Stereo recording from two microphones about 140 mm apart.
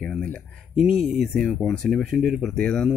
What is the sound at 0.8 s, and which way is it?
Speech, centre (ahead or behind).